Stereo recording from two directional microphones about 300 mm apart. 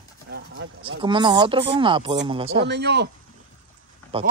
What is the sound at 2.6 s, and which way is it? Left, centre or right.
Speech, right.